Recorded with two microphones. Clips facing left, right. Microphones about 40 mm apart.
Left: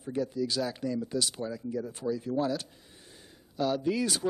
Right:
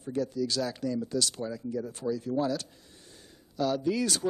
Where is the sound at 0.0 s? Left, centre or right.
Centre.